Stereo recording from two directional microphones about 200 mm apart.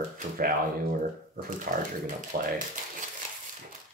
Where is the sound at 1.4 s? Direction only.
40° right (ahead or behind).